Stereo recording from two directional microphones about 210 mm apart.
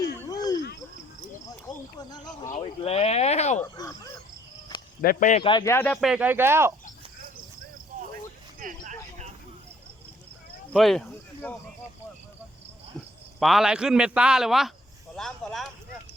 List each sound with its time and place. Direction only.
1.2 s cricket: 20° left (ahead or behind)
2.5 s a sound: 30° left (ahead or behind)
3.6 s dog: 15° left (ahead or behind)
4.9 s speech: 40° left (ahead or behind)
5.4 s speech: 20° left (ahead or behind)
5.7 s speech: 5° left (ahead or behind); by 6.7 s 10° right (ahead or behind)
8.5 s a sound: 40° right (ahead or behind)
10.7 s a sound: centre (ahead or behind)
13.4 s a man's voice: centre (ahead or behind)